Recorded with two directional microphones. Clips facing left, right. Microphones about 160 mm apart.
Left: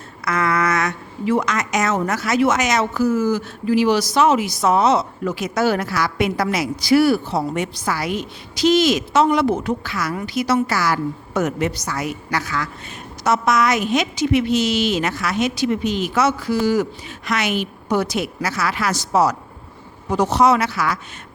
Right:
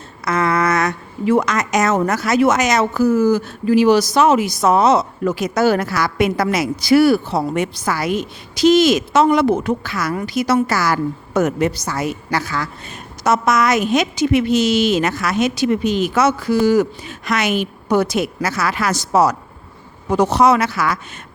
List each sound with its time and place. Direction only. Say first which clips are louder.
0.3 s a sound: right 3 dB; 25° right (ahead or behind)
1.2 s a woman's voice: right 3 dB; 50° right (ahead or behind); by 12.6 s 30° right (ahead or behind)
13.2 s a woman's voice: right 2 dB; 45° right (ahead or behind)